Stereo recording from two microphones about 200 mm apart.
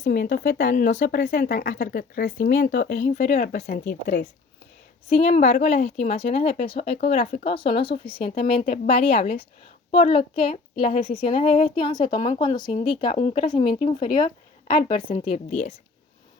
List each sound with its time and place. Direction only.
0.0 s speech: 45° left (ahead or behind)
5.0 s a woman's voice: 30° left (ahead or behind)
11.8 s a woman's voice: 25° left (ahead or behind)